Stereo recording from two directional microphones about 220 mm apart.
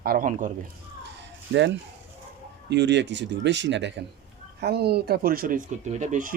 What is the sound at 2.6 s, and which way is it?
Speech, 50° right (ahead or behind).